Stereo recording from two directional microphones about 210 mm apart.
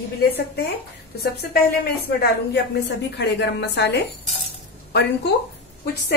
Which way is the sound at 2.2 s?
50° left (ahead or behind).